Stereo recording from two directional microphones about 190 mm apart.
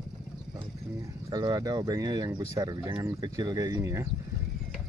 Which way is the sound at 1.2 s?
20° right (ahead or behind).